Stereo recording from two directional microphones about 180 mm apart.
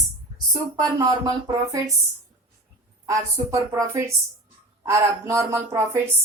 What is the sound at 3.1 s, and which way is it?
A woman's voice, 15° right (ahead or behind).